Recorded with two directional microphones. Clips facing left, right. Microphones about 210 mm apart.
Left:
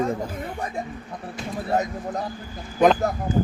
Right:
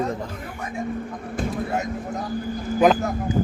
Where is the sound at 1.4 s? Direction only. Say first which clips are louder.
Right 8 dB; 55° right (ahead or behind).